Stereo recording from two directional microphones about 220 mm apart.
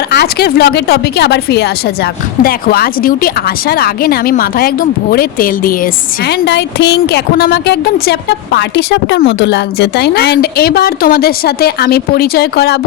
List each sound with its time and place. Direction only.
0.1 s a woman's voice: 45° left (ahead or behind)